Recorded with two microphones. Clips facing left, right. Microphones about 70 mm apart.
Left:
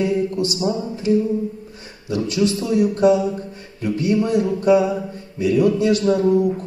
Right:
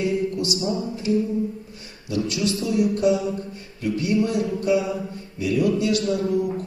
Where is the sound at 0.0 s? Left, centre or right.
Left.